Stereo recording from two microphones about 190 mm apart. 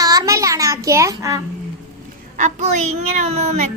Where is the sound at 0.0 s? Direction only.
20° right (ahead or behind).